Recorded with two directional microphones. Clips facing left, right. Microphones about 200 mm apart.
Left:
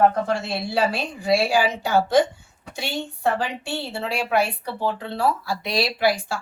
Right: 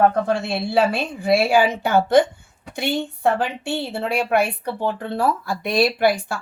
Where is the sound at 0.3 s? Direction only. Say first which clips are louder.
Right 4 dB; 60° right (ahead or behind).